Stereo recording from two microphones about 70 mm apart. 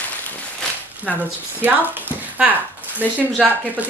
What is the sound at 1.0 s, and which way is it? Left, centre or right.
Speech, right.